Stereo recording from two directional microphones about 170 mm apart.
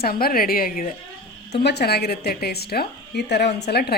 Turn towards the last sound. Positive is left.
turn(degrees=70)  # may be behind; listen again after turning